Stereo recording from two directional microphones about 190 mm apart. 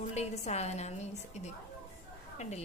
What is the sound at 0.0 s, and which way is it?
A woman's voice, 35° left (ahead or behind).